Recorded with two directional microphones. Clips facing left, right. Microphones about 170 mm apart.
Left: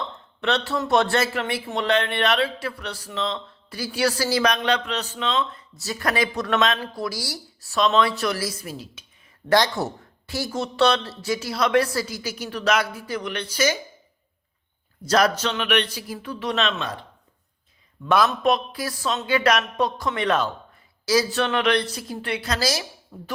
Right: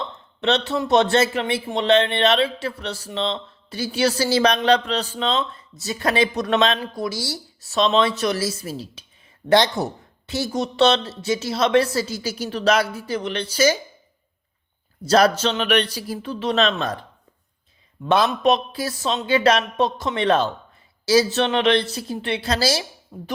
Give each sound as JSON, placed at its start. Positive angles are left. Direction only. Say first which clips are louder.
{"t": 0.4, "sound": "a man's voice", "louder": "right 3 dB", "side_deg": -20}
{"t": 5.8, "sound": "a man's voice", "louder": "right 3 dB", "side_deg": -25}
{"t": 15.0, "sound": "speech", "louder": "right 4 dB", "side_deg": -30}
{"t": 18.3, "sound": "a man's voice", "louder": "right 3 dB", "side_deg": -20}